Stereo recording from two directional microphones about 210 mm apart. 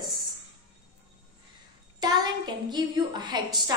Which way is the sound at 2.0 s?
20° right (ahead or behind).